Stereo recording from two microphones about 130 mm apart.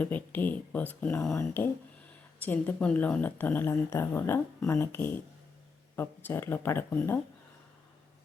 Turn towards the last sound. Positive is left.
turn(degrees=15)  # may be behind; listen again after turning